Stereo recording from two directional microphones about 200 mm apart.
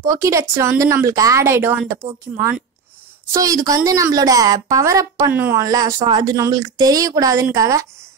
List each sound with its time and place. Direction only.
0.0 s a woman's voice: 15° right (ahead or behind)